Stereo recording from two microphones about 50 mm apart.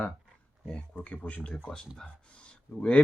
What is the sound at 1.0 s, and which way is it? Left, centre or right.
Speech, left.